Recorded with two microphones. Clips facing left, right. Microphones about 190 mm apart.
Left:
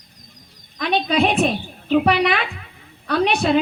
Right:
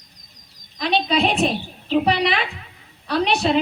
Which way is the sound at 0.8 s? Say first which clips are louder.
Left 1 dB; 55° left (ahead or behind).